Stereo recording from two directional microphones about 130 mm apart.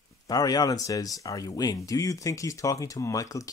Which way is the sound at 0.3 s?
30° left (ahead or behind).